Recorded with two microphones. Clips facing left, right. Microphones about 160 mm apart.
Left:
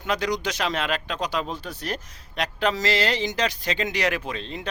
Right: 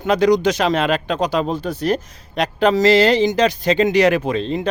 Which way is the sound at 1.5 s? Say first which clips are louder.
Right 11 dB; 45° right (ahead or behind).